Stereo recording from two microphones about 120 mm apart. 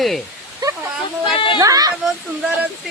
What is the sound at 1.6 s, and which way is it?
Speech, 30° right (ahead or behind).